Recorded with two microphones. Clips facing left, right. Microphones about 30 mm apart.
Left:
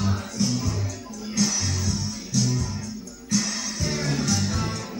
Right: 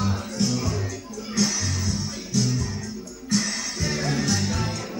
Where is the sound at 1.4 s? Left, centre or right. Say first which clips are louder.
Even; centre.